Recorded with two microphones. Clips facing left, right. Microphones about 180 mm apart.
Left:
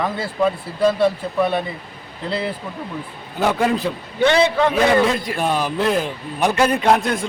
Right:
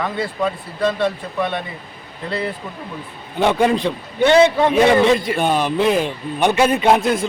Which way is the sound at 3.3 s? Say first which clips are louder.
Right 3 dB; centre (ahead or behind).